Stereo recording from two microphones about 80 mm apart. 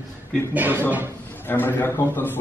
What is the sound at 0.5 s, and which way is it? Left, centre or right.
Speech, right.